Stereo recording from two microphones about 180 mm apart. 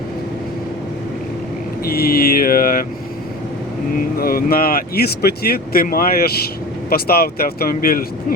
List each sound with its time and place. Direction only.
1.8 s speech: 55° left (ahead or behind)
3.9 s speech: 55° left (ahead or behind)